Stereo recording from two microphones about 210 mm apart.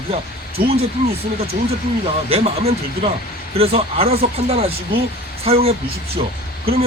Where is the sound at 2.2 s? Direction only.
30° right (ahead or behind).